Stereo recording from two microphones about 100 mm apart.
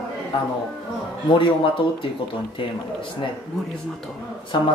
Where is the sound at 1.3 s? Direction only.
60° left (ahead or behind).